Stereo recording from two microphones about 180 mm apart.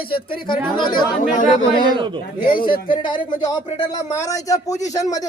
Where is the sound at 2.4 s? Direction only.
50° left (ahead or behind).